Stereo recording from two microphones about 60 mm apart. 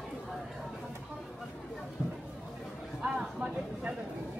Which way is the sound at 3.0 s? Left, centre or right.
Centre.